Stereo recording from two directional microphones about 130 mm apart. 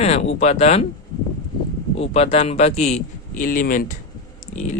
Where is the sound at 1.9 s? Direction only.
50° left (ahead or behind); by 4.0 s 90° left.